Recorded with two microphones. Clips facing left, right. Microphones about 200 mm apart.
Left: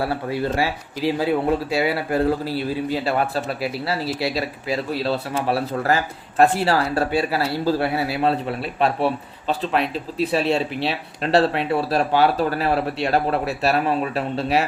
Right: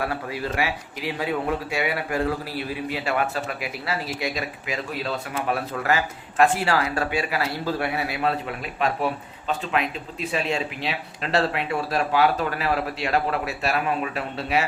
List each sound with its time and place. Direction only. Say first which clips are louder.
0.0 s speech: left 5 dB; 30° left (ahead or behind)